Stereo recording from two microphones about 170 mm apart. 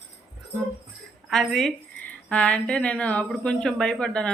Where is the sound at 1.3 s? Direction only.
Centre (ahead or behind).